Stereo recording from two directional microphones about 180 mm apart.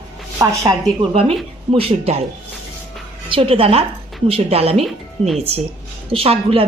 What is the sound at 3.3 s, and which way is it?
A woman's voice, 30° right (ahead or behind).